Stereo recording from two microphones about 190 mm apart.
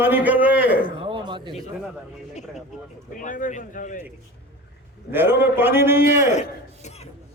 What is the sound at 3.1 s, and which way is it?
Speech, 45° left (ahead or behind).